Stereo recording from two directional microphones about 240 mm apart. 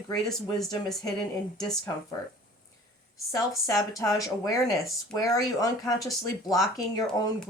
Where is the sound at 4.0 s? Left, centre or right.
Centre.